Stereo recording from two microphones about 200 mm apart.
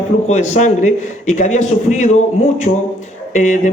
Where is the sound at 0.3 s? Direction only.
35° left (ahead or behind).